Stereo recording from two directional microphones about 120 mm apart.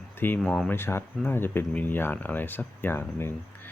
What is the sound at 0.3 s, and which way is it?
Speech, centre (ahead or behind).